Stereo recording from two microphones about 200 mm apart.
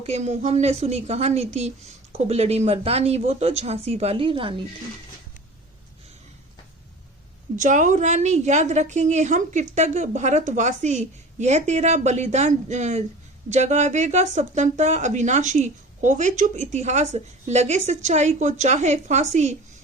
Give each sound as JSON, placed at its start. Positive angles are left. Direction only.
{"t": 0.0, "sound": "speech", "side_deg": -35}
{"t": 7.5, "sound": "speech", "side_deg": -40}